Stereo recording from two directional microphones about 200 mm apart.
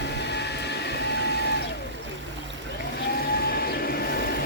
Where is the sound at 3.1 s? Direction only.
50° left (ahead or behind).